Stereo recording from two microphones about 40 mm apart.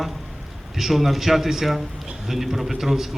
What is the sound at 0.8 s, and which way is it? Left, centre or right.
A man's voice, centre.